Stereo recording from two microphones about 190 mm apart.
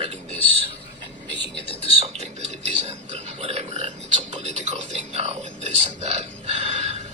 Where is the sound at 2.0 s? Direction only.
35° right (ahead or behind).